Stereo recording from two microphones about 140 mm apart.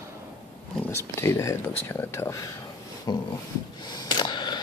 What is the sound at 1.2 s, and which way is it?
Speech, 20° left (ahead or behind).